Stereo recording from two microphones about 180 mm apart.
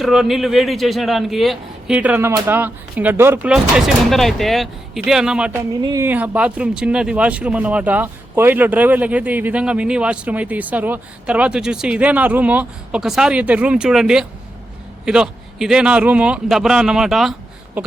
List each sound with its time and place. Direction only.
0.0 s a man's voice: centre (ahead or behind)
5.8 s a man's voice: 15° right (ahead or behind); by 17.3 s centre (ahead or behind)